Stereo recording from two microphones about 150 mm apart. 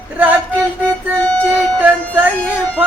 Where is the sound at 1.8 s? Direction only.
10° right (ahead or behind).